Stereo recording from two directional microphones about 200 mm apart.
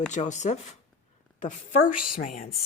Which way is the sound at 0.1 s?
35° left (ahead or behind).